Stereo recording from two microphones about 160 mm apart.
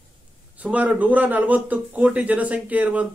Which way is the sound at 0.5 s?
10° right (ahead or behind).